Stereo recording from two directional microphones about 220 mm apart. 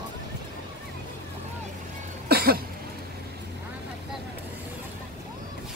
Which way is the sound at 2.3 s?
45° right (ahead or behind).